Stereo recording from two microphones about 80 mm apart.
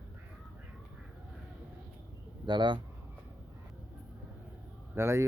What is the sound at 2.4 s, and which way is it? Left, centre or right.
Speech, right.